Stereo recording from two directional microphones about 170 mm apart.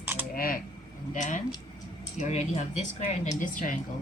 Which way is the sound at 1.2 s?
45° left (ahead or behind).